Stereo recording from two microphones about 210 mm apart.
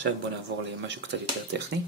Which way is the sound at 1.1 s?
55° right (ahead or behind).